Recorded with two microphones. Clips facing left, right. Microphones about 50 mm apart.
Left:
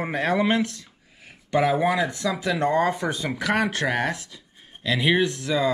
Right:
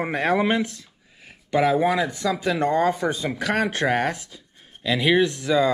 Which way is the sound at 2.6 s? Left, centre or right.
Left.